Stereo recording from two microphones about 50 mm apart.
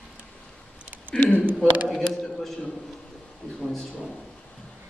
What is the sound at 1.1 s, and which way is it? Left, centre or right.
A woman's voice, centre.